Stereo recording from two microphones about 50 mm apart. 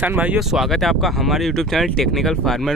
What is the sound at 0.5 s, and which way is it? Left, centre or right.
Speech, centre.